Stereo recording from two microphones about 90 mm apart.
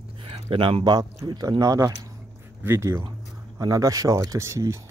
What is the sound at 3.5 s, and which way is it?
Speech, 40° right (ahead or behind).